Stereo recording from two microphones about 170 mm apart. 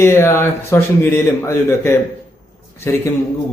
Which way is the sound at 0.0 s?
15° left (ahead or behind).